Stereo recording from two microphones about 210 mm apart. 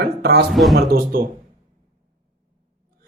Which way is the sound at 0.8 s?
45° right (ahead or behind).